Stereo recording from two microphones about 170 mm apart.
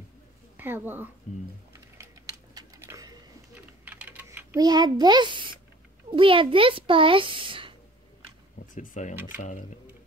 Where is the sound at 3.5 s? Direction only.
10° right (ahead or behind).